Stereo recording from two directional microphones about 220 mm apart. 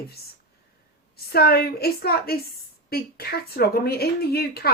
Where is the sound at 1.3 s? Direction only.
45° left (ahead or behind).